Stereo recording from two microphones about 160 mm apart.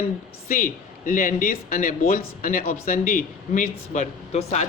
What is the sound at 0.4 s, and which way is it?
Speech, 60° left (ahead or behind).